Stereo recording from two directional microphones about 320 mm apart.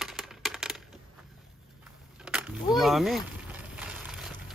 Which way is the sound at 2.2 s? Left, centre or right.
Centre.